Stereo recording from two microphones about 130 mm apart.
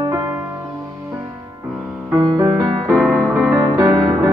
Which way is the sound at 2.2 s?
30° right (ahead or behind).